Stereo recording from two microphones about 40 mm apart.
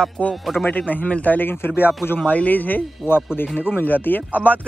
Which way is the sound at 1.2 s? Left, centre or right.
Left.